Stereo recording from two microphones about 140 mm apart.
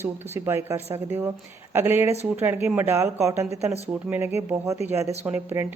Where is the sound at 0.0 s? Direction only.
15° right (ahead or behind).